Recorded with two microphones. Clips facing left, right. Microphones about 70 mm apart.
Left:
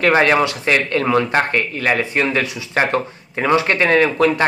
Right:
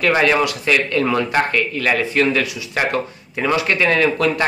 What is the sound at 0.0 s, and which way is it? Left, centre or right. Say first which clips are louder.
Speech: left 2 dB; left.